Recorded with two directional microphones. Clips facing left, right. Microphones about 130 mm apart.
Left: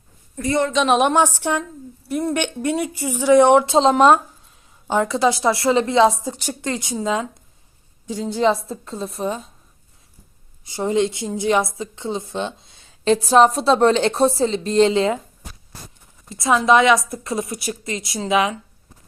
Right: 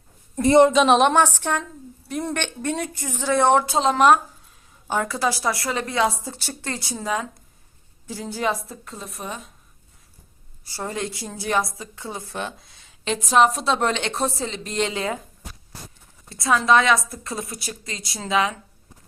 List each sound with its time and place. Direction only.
0.3 s a woman's voice: 25° right (ahead or behind)
0.7 s speech: centre (ahead or behind)
2.3 s speech: 10° left (ahead or behind)
3.8 s a woman's voice: 25° left (ahead or behind)
10.6 s a woman's voice: 20° left (ahead or behind)
16.3 s a woman's voice: 25° left (ahead or behind)